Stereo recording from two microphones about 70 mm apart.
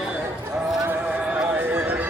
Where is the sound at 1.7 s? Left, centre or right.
Right.